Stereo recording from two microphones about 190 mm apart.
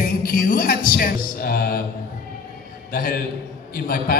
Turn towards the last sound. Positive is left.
turn(degrees=50)  # may be behind; listen again after turning